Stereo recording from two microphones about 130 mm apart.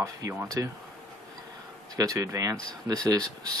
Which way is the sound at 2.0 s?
25° right (ahead or behind).